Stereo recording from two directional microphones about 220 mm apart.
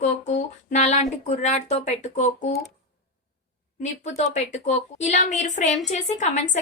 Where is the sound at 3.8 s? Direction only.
30° left (ahead or behind).